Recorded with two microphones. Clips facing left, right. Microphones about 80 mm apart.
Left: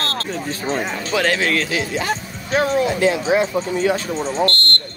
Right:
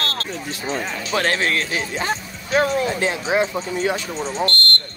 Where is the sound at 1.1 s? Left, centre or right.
Right.